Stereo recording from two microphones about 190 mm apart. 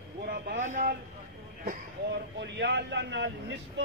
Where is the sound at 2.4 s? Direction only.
65° right (ahead or behind).